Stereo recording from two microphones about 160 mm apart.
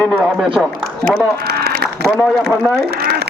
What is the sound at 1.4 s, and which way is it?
Run, 85° right.